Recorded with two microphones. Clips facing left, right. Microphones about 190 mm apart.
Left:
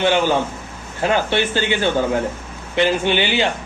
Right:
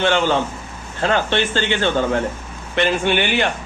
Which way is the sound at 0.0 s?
10° left (ahead or behind).